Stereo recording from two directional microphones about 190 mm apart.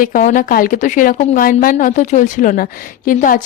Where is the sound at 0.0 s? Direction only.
45° left (ahead or behind).